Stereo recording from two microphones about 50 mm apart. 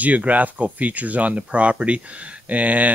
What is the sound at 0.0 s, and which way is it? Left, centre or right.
Speech, right.